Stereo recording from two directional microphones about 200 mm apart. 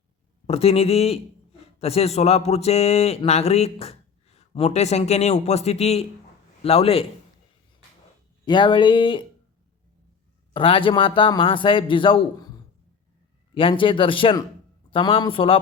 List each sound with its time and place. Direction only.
0.4 s a man's voice: 30° left (ahead or behind)
8.4 s a man's voice: 25° left (ahead or behind)
10.5 s a man's voice: 25° left (ahead or behind)
13.5 s a man's voice: 25° left (ahead or behind)